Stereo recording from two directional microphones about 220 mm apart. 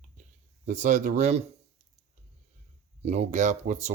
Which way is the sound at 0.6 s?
35° right (ahead or behind).